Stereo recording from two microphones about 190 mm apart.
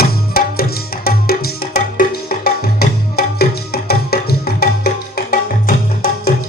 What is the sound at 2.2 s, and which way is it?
Music, 55° left (ahead or behind).